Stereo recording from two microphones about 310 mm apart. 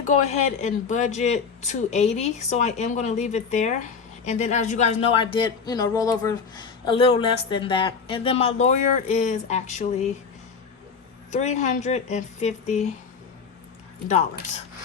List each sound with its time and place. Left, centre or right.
0.0 s speech: left
11.3 s speech: left